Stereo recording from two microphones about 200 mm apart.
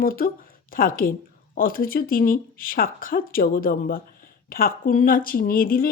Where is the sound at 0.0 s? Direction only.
45° left (ahead or behind).